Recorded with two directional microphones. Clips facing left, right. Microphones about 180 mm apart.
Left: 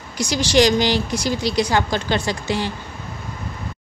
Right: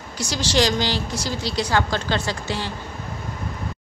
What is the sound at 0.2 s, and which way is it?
Speech, 15° left (ahead or behind).